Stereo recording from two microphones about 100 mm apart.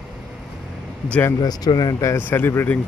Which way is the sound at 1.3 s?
40° left (ahead or behind).